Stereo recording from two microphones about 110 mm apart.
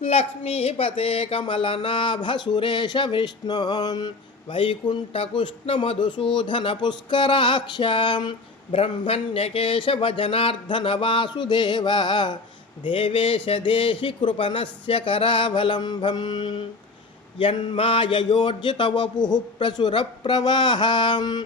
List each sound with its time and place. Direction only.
0.0 s speech: 60° left (ahead or behind); by 21.4 s 40° left (ahead or behind)